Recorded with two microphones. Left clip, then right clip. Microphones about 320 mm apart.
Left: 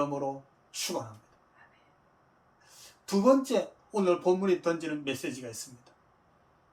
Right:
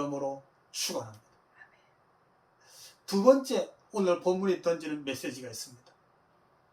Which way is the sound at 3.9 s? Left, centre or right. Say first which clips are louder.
Left 1 dB; centre.